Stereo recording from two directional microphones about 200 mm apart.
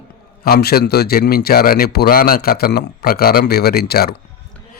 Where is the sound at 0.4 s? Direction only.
50° left (ahead or behind).